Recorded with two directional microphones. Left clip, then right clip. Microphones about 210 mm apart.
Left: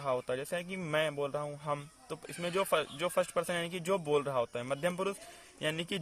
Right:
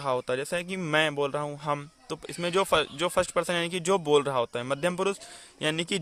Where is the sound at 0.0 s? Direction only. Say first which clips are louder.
Right 6 dB; 30° right (ahead or behind).